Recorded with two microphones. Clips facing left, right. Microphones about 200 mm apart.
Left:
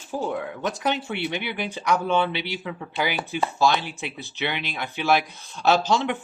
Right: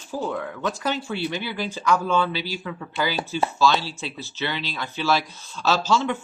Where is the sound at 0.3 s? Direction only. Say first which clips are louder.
Right 1 dB; 20° left (ahead or behind).